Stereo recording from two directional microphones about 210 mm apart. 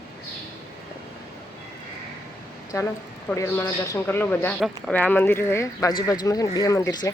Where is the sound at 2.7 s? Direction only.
15° left (ahead or behind).